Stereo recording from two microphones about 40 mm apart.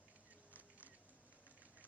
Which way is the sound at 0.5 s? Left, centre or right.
Right.